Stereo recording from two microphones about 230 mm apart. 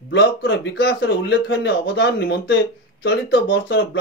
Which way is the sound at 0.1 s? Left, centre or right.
Left.